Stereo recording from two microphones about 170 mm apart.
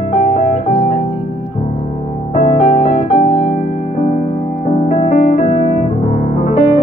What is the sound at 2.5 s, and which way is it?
Music, 45° left (ahead or behind).